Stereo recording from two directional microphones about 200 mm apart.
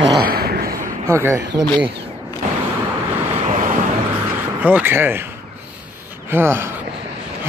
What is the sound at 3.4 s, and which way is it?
Vehicle, 40° right (ahead or behind).